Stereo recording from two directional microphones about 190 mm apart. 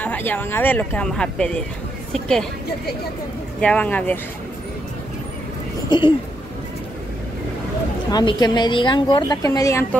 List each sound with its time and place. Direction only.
0.0 s speech: 10° left (ahead or behind)
3.6 s speech: 5° left (ahead or behind)
5.9 s speech: 25° left (ahead or behind)
8.1 s speech: 20° left (ahead or behind)